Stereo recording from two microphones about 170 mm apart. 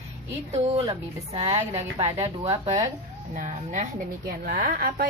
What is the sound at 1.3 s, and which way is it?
Speech, 35° right (ahead or behind).